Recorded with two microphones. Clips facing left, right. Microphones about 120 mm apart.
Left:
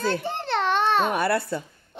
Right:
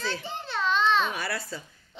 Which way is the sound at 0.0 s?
55° left (ahead or behind).